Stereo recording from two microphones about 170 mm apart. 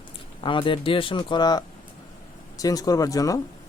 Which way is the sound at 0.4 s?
30° left (ahead or behind).